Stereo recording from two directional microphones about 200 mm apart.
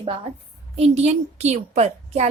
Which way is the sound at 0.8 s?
30° right (ahead or behind).